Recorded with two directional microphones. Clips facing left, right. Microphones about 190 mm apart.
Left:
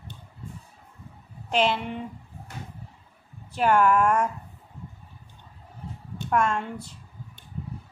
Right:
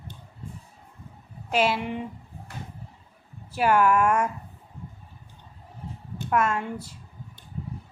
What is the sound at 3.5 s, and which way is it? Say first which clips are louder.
Speech: even; 5° right (ahead or behind).